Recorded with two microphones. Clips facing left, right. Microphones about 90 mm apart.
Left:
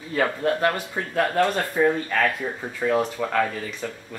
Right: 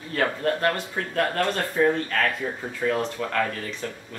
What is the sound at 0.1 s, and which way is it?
Speech, 10° left (ahead or behind).